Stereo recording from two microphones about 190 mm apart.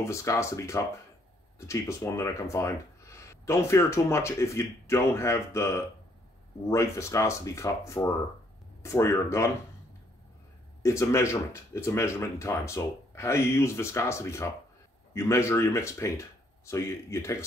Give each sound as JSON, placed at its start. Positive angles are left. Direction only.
{"t": 0.0, "sound": "speech", "side_deg": 15}
{"t": 10.8, "sound": "speech", "side_deg": 15}